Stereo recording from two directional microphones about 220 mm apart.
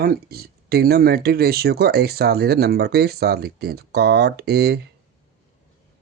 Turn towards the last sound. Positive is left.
turn(degrees=-50)  # may be behind; listen again after turning